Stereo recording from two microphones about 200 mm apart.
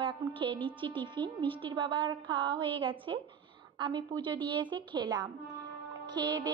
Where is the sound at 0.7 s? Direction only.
25° right (ahead or behind).